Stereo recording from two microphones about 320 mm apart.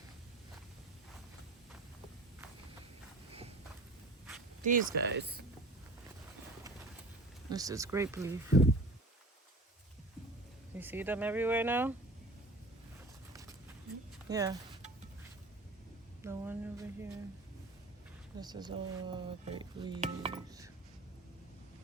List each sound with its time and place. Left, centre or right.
4.6 s speech: right
7.5 s speech: centre
10.8 s speech: centre
14.3 s speech: centre
16.2 s a sound: centre
18.3 s speech: centre